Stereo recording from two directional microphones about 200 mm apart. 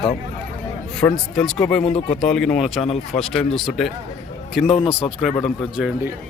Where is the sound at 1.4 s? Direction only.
5° left (ahead or behind).